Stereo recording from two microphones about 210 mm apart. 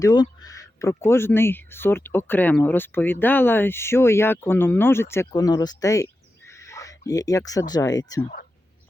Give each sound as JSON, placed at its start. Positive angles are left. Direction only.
{"t": 0.0, "sound": "speech", "side_deg": 20}